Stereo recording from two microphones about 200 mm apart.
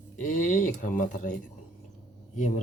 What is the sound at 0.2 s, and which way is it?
Speech, 40° left (ahead or behind).